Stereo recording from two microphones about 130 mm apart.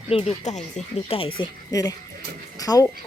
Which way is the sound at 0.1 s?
50° left (ahead or behind).